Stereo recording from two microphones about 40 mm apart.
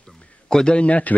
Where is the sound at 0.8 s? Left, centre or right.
Left.